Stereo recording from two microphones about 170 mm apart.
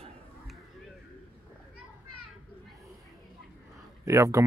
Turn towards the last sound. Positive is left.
turn(degrees=-20)  # may be behind; listen again after turning